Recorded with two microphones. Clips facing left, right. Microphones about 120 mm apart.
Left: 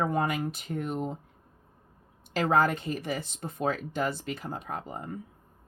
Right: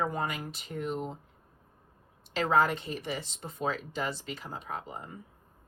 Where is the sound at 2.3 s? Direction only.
50° left (ahead or behind).